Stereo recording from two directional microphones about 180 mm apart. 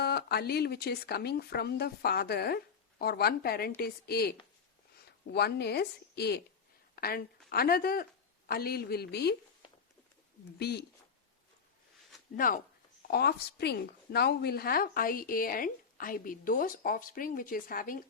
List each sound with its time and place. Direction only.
0.0 s a woman's voice: 65° left (ahead or behind)
10.6 s speech: 65° left (ahead or behind)
13.1 s a woman's voice: 60° left (ahead or behind)